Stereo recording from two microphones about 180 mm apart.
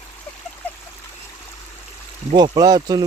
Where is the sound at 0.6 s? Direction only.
10° left (ahead or behind).